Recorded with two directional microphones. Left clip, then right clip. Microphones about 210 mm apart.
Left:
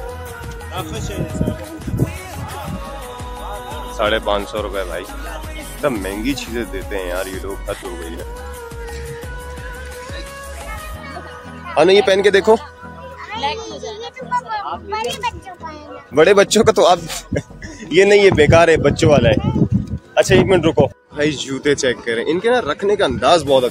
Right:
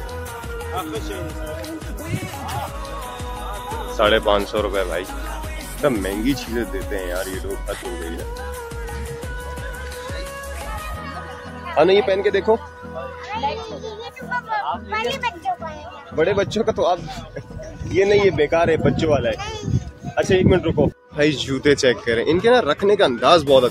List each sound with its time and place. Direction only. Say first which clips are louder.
3.9 s speech: right 1 dB; 5° right (ahead or behind)
11.7 s speech: left 4 dB; 25° left (ahead or behind); by 12.5 s 40° left (ahead or behind)
14.3 s music: left 2 dB; 10° right (ahead or behind)
16.2 s speech: left 8 dB; 50° left (ahead or behind)
21.2 s speech: even; centre (ahead or behind)